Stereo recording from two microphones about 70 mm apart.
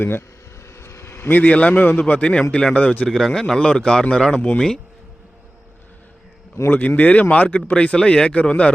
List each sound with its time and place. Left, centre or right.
0.0 s a man's voice: left; by 3.1 s centre
3.1 s a man's voice: centre
6.7 s a man's voice: left